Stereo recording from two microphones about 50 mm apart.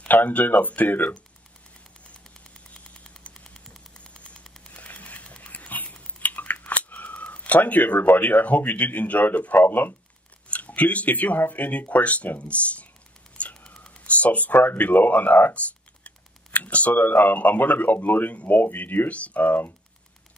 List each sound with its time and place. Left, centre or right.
0.1 s speech: left
2.7 s engine: centre
3.5 s a sound: centre
4.0 s vehicle: left
4.7 s a sound: left
5.4 s scissors: left
8.2 s speech: left
10.5 s speech: left
13.4 s a sound: left
14.5 s speech: left